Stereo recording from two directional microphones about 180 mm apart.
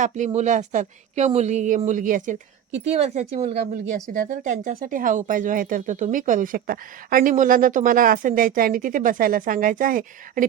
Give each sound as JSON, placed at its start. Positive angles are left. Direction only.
{"t": 0.3, "sound": "speech", "side_deg": -40}